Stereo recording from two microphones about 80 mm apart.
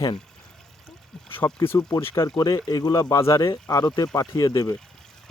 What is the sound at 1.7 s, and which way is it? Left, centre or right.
Speech, left.